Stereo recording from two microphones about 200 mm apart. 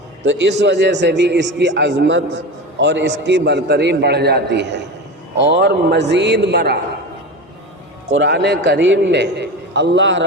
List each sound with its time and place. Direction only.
0.3 s a man's voice: 60° right (ahead or behind)
8.1 s a man's voice: 60° right (ahead or behind)